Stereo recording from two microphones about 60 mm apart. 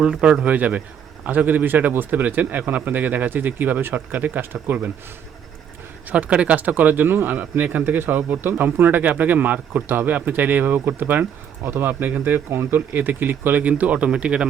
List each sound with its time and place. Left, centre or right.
0.0 s speech: centre; by 4.9 s right
6.1 s speech: right